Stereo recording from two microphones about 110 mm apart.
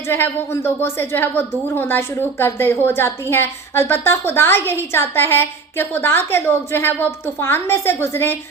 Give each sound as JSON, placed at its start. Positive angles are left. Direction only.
{"t": 0.1, "sound": "a woman's voice", "side_deg": 20}